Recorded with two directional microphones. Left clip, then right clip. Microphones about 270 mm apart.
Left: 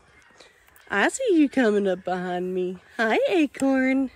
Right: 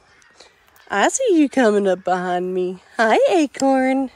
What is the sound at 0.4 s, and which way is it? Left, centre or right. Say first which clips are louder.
Speech: right 5 dB; centre.